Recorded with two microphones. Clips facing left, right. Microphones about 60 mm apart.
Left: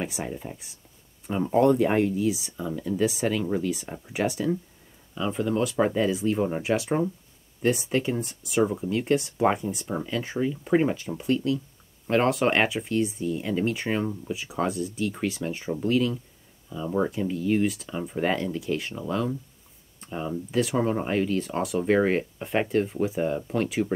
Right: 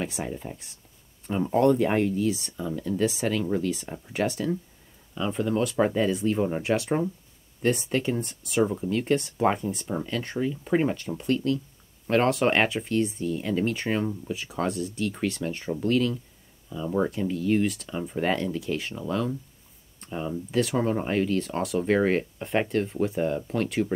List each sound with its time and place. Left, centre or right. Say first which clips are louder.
0.0 s speech: even; centre